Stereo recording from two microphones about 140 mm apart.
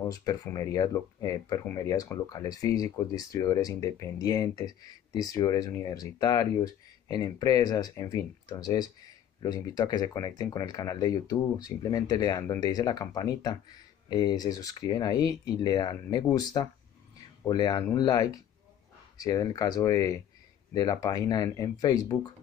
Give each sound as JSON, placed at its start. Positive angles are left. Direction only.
{"t": 0.1, "sound": "speech", "side_deg": 25}
{"t": 17.5, "sound": "speech", "side_deg": 30}